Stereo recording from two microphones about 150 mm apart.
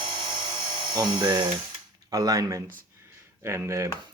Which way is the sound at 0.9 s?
30° right (ahead or behind).